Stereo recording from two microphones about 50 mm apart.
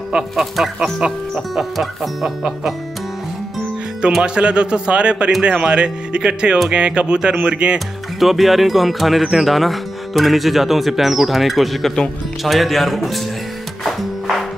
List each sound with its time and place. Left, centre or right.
0.1 s speech: centre
0.6 s speech: centre
4.2 s speech: right
8.2 s speech: centre
13.8 s music: centre